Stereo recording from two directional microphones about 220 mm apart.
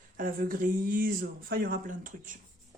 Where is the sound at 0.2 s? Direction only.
40° right (ahead or behind).